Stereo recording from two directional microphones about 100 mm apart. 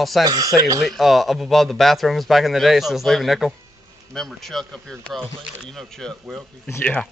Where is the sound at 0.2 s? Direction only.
35° right (ahead or behind).